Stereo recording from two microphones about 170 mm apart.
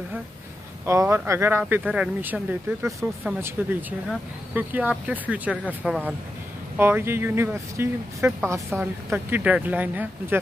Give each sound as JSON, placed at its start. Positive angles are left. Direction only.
{"t": 0.8, "sound": "speech", "side_deg": -15}